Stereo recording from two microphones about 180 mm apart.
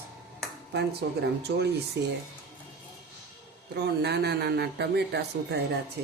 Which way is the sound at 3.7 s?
70° right (ahead or behind).